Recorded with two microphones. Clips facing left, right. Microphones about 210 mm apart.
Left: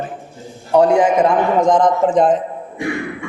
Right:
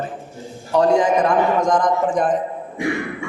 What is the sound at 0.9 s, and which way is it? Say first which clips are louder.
A man's voice: left 3 dB; 25° left (ahead or behind).